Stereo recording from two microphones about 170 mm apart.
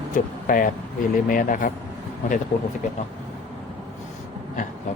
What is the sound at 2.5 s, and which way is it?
Speech, 65° left (ahead or behind).